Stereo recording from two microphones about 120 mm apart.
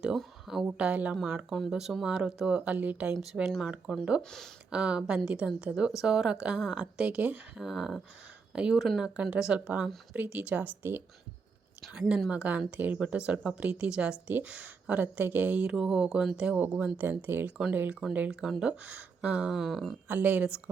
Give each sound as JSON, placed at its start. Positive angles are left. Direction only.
{"t": 0.0, "sound": "speech", "side_deg": -5}
{"t": 4.2, "sound": "speech", "side_deg": 5}
{"t": 4.7, "sound": "speech", "side_deg": -10}
{"t": 11.8, "sound": "speech", "side_deg": -5}
{"t": 20.1, "sound": "speech", "side_deg": -15}